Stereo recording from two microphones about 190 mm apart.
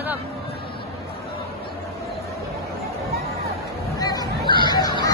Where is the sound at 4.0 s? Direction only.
20° left (ahead or behind).